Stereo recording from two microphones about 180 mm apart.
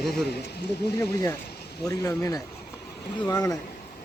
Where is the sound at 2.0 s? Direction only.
20° left (ahead or behind).